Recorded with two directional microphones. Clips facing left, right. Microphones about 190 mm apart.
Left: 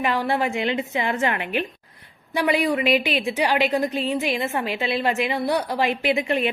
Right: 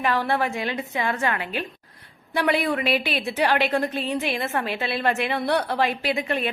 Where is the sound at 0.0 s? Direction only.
15° left (ahead or behind).